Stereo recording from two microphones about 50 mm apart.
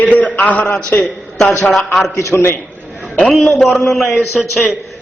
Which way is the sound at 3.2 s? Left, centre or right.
Centre.